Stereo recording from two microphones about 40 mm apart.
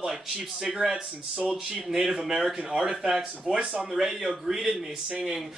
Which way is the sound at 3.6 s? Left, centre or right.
Right.